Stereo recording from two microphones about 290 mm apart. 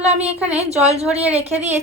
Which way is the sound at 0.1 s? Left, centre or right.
Right.